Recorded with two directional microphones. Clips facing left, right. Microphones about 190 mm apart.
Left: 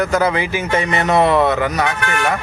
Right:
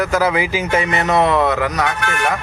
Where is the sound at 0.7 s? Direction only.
5° right (ahead or behind).